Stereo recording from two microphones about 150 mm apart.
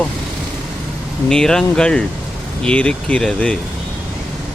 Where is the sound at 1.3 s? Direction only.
5° left (ahead or behind).